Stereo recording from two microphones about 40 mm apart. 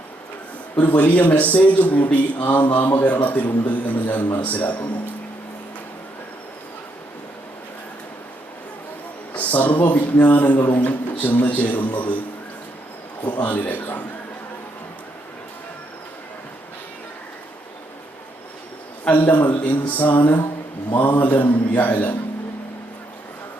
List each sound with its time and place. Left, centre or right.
0.9 s a man's voice: left
9.3 s speech: left
13.2 s speech: left
19.1 s speech: left